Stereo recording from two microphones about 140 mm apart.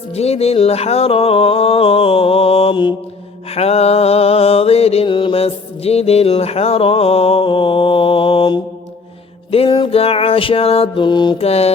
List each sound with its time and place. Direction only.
0.1 s music: 45° left (ahead or behind)
11.4 s music: 45° left (ahead or behind)